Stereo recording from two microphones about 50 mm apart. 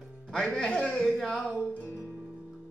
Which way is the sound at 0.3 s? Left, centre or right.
Centre.